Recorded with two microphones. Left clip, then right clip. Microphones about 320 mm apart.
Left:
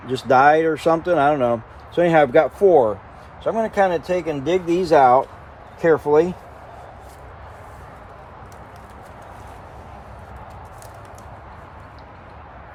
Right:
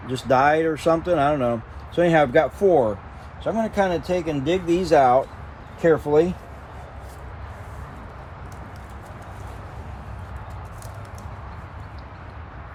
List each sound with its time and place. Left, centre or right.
0.1 s speech: left